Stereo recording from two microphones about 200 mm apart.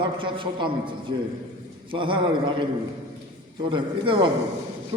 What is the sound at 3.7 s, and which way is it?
Speech, 25° right (ahead or behind).